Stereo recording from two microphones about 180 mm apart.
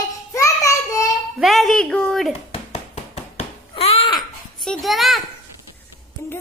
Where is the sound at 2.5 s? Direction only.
35° left (ahead or behind).